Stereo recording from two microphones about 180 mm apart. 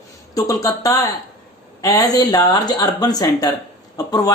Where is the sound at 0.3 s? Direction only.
20° left (ahead or behind).